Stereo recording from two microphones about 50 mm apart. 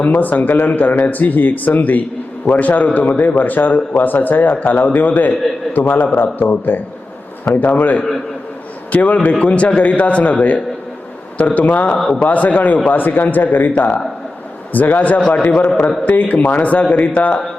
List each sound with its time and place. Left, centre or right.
0.0 s a man's voice: left
7.7 s a man's voice: left
11.9 s a man's voice: centre
12.2 s a man's voice: left